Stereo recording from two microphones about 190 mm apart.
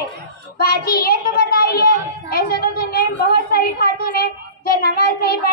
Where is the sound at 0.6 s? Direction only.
55° left (ahead or behind).